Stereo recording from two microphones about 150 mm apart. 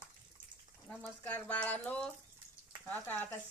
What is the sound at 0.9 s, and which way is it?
Speech, 5° left (ahead or behind).